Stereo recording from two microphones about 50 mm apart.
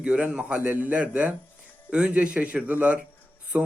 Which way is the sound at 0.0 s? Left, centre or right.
Right.